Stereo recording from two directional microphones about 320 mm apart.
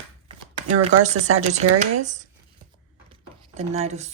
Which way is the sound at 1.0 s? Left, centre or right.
Right.